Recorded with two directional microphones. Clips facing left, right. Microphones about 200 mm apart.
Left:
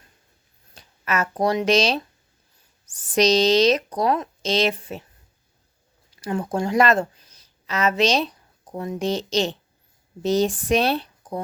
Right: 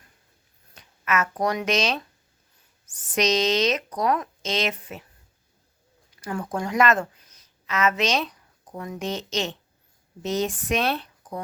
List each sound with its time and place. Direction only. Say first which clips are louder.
0.7 s a woman's voice: even; 30° left (ahead or behind)
6.1 s a woman's voice: left 4 dB; 30° left (ahead or behind)